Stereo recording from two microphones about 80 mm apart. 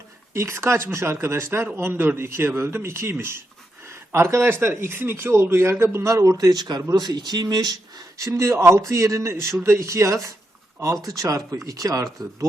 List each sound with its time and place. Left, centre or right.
0.3 s a man's voice: right
6.3 s speech: right
8.2 s a man's voice: right